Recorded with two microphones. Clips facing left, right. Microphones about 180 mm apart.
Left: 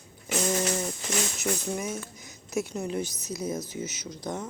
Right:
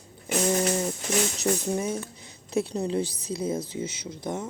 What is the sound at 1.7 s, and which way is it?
A man's voice, 30° right (ahead or behind).